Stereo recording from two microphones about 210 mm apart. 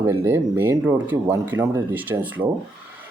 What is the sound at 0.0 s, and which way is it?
Speech, 10° right (ahead or behind).